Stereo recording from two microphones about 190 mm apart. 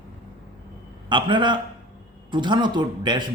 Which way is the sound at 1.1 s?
25° right (ahead or behind).